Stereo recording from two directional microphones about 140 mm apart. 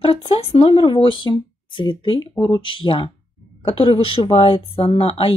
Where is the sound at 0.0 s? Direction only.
40° left (ahead or behind).